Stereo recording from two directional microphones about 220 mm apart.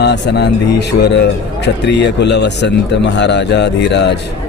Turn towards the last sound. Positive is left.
turn(degrees=50)  # may be behind; listen again after turning